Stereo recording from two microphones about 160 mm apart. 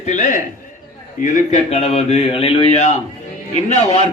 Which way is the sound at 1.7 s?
40° left (ahead or behind).